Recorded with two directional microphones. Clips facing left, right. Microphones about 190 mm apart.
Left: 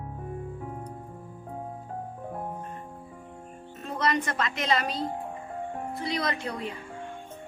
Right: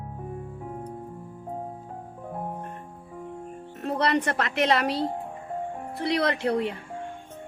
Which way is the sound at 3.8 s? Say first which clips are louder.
Right 4 dB; 65° right (ahead or behind).